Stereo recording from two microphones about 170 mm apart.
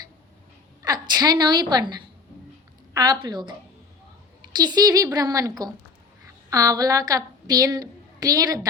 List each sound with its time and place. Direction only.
0.8 s a woman's voice: 25° right (ahead or behind)
4.5 s a woman's voice: 25° right (ahead or behind)